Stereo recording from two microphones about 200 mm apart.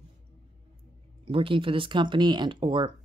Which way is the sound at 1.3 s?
25° right (ahead or behind).